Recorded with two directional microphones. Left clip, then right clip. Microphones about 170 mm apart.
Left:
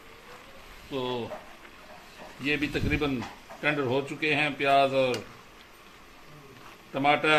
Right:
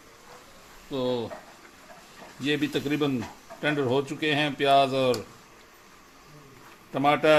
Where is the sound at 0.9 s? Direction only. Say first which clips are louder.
Right 4 dB; 80° right.